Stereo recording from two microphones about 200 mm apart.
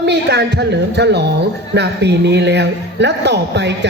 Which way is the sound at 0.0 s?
55° right (ahead or behind).